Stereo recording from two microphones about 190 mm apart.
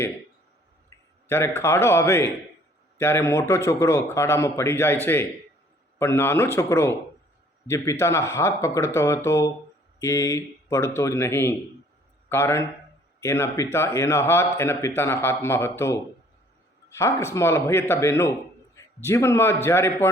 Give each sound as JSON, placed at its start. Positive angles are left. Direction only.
{"t": 0.9, "sound": "a man's voice", "side_deg": 15}